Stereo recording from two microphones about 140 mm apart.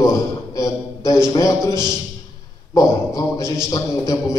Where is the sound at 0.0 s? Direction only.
25° left (ahead or behind).